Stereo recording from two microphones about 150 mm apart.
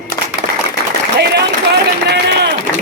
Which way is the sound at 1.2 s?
90° right.